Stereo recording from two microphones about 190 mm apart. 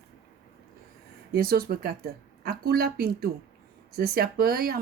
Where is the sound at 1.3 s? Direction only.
55° right (ahead or behind).